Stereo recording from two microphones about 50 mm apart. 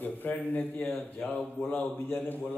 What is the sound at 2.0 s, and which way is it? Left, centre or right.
Speech, left.